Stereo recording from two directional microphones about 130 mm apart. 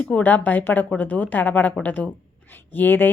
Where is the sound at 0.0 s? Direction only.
10° left (ahead or behind).